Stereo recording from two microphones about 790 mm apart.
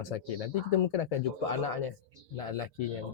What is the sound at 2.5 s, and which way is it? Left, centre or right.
Speech, left.